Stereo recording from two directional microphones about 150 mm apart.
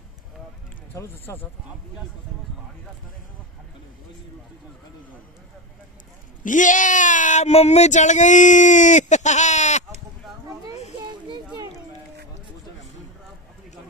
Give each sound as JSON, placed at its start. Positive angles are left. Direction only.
{"t": 0.9, "sound": "speech", "side_deg": 15}
{"t": 6.4, "sound": "speech", "side_deg": 60}
{"t": 11.1, "sound": "a sound", "side_deg": -30}